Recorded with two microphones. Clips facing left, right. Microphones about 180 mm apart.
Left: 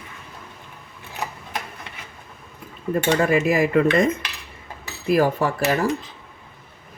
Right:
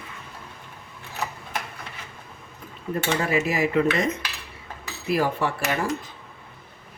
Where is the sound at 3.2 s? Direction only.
50° left (ahead or behind).